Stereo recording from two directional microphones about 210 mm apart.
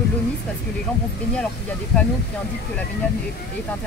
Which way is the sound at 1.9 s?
5° left (ahead or behind).